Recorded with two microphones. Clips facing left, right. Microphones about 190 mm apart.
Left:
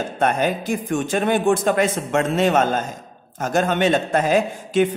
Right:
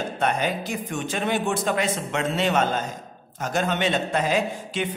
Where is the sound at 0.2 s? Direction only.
50° left (ahead or behind).